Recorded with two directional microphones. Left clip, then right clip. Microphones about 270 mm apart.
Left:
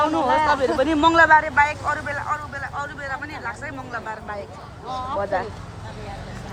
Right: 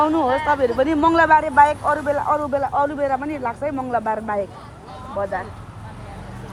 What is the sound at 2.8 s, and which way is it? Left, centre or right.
Speech, centre.